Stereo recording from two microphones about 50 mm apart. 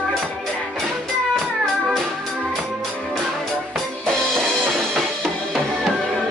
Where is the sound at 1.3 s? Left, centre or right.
Centre.